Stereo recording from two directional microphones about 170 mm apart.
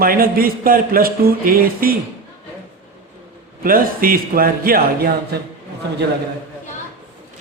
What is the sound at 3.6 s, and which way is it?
Speech, 55° right (ahead or behind).